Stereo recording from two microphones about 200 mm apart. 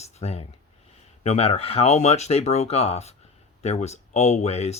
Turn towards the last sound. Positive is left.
turn(degrees=30)  # may be behind; listen again after turning